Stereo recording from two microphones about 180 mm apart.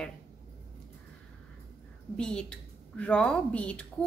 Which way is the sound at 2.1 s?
5° left (ahead or behind).